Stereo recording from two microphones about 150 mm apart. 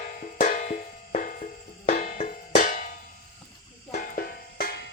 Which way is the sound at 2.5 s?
60° left (ahead or behind).